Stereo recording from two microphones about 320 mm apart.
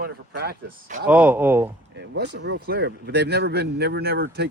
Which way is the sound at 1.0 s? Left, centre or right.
Centre.